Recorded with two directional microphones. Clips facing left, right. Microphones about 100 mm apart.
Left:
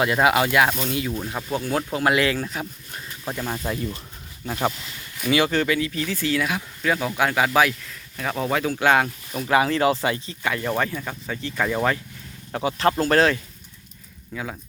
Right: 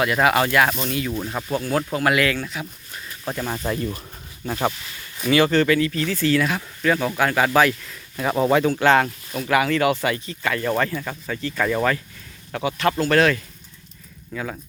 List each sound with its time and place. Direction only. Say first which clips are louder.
0.0 s speech: even; 20° left (ahead or behind)
1.1 s speech: right 2 dB; centre (ahead or behind)
1.5 s speech: right 2 dB; 15° left (ahead or behind); by 3.0 s 35° left (ahead or behind)
3.2 s speech: right 2 dB; centre (ahead or behind)
7.9 s speech: right 4 dB; 10° right (ahead or behind)
8.7 s speech: right 2 dB; 10° left (ahead or behind)
9.5 s speech: even; 25° left (ahead or behind); by 11.9 s 10° left (ahead or behind)
12.6 s speech: even; 30° left (ahead or behind)
14.3 s speech: right 2 dB; 10° left (ahead or behind)